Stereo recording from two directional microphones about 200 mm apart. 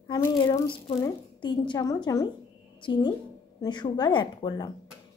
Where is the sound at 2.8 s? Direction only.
20° left (ahead or behind).